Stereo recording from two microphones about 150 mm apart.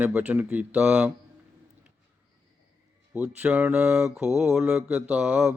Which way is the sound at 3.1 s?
10° right (ahead or behind).